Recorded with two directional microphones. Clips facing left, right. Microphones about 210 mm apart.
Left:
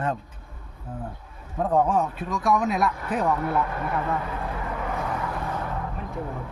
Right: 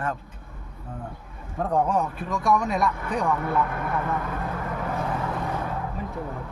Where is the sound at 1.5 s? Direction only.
Centre (ahead or behind).